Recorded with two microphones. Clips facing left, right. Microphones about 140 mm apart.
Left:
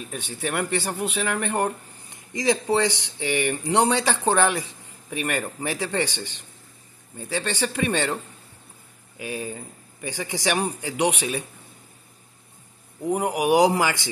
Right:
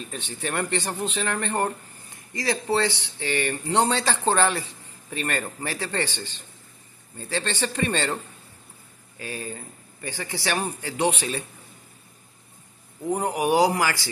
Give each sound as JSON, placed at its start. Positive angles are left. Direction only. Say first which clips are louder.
{"t": 0.1, "sound": "speech", "louder": "left 2 dB", "side_deg": 10}
{"t": 9.2, "sound": "speech", "louder": "left 3 dB", "side_deg": 15}
{"t": 13.0, "sound": "speech", "louder": "left 1 dB", "side_deg": 10}